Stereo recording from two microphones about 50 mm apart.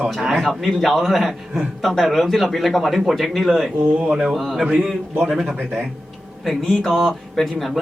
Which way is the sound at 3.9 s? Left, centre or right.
Right.